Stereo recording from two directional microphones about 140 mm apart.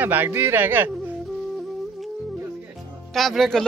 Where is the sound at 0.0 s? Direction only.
15° right (ahead or behind).